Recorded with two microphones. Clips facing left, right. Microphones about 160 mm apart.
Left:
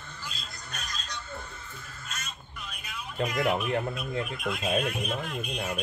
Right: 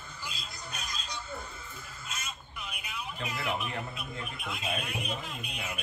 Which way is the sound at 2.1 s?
10° right (ahead or behind).